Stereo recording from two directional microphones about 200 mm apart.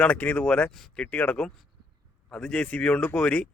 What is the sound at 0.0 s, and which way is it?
A man's voice, 5° left (ahead or behind).